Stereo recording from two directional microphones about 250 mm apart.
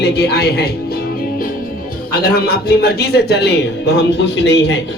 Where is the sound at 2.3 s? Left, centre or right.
Left.